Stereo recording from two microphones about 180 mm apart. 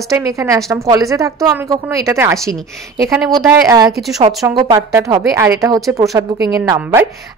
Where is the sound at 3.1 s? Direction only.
5° right (ahead or behind).